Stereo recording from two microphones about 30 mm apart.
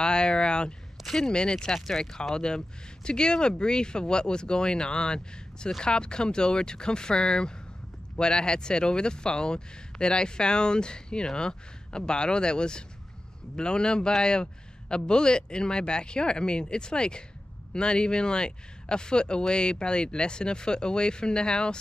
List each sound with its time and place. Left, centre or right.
0.0 s speech: left